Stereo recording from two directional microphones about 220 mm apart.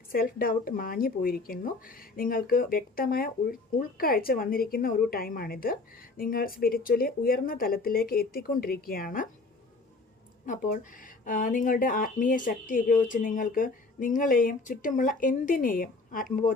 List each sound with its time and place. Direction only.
0.1 s speech: 40° left (ahead or behind)
10.4 s speech: 40° left (ahead or behind)